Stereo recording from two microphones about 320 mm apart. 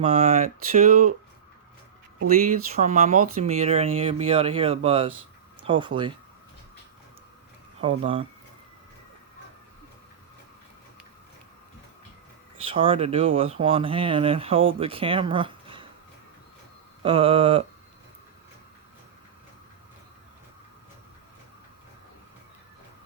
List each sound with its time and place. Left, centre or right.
0.0 s speech: right
2.2 s speech: right
7.8 s speech: centre
12.6 s speech: centre
17.0 s speech: centre